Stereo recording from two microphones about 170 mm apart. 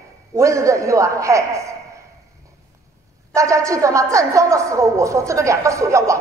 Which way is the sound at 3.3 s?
20° right (ahead or behind).